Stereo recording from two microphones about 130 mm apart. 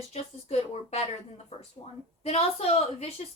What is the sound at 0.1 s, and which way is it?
A woman's voice, 55° left (ahead or behind).